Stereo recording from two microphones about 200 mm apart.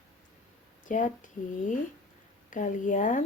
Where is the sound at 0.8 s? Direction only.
40° left (ahead or behind).